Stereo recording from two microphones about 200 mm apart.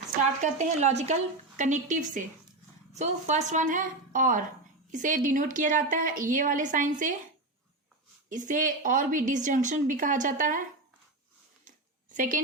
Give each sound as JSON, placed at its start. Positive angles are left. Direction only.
{"t": 0.4, "sound": "a woman's voice", "side_deg": -35}
{"t": 8.3, "sound": "a woman's voice", "side_deg": -40}
{"t": 11.6, "sound": "a sound", "side_deg": -40}